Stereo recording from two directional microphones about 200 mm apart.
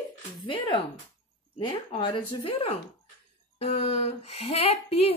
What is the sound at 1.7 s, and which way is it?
Speech, 25° left (ahead or behind).